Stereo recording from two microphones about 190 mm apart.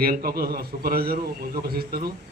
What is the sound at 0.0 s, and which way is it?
A man's voice, 50° right (ahead or behind).